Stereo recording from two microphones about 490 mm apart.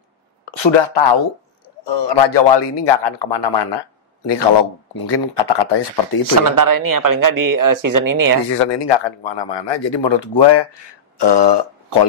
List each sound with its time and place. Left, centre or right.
0.5 s a man's voice: left
4.9 s speech: left
6.5 s speech: right
8.5 s a man's voice: left
11.1 s burping: left